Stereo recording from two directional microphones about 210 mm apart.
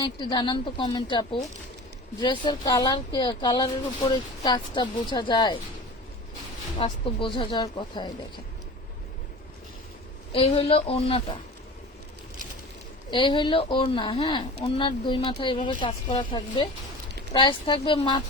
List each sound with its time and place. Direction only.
0.0 s speech: 20° left (ahead or behind)
6.7 s speech: 25° left (ahead or behind)
10.3 s speech: 30° left (ahead or behind)
13.1 s speech: 20° left (ahead or behind)